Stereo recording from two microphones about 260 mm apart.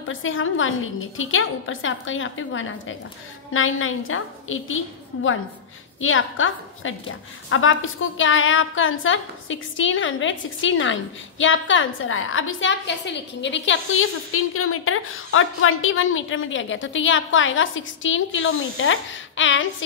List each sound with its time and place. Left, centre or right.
0.1 s a woman's voice: left